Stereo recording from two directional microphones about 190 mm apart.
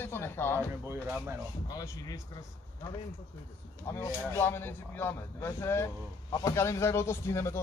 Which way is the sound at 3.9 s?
15° left (ahead or behind).